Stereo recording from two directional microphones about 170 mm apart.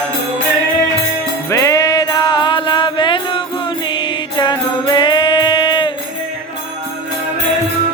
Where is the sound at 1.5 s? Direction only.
20° left (ahead or behind).